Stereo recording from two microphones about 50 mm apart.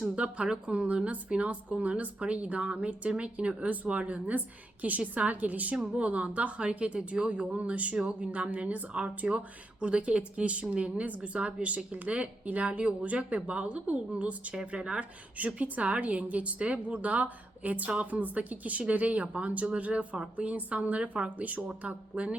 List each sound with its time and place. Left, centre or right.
0.2 s a woman's voice: right